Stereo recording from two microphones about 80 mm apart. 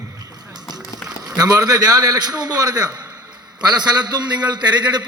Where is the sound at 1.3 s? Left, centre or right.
Right.